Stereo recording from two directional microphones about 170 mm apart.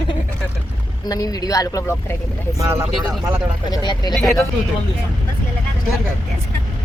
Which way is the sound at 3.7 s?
25° left (ahead or behind).